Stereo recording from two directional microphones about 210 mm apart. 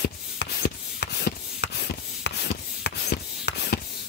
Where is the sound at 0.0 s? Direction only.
50° left (ahead or behind).